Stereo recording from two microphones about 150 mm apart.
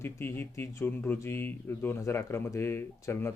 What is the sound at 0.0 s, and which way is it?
Speech, 15° left (ahead or behind).